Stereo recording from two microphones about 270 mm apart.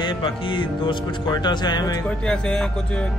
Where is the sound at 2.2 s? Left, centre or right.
Centre.